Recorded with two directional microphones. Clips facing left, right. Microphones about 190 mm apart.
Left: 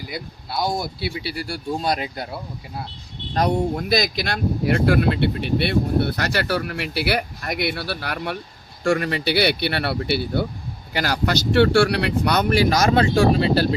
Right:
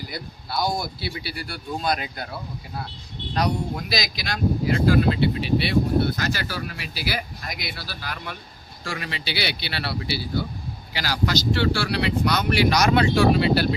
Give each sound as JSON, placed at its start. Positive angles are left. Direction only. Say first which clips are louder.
{"t": 0.1, "sound": "speech", "louder": "left 2 dB", "side_deg": 25}
{"t": 3.3, "sound": "speech", "louder": "left 5 dB", "side_deg": 50}